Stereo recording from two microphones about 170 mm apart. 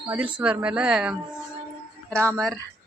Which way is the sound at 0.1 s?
10° right (ahead or behind).